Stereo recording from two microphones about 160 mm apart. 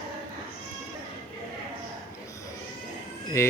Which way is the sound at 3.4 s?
15° left (ahead or behind).